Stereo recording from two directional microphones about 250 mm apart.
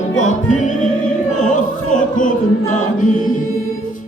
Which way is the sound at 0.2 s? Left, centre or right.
Left.